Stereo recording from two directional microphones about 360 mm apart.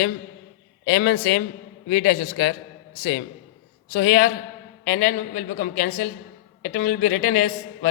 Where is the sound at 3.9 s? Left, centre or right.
Left.